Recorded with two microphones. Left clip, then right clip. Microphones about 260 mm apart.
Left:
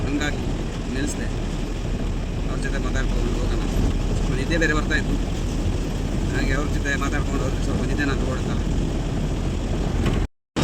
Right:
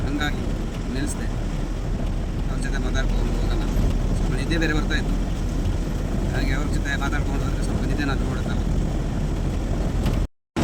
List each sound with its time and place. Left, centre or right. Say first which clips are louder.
4.5 s speech: left 3 dB; centre
6.4 s speech: left 3 dB; centre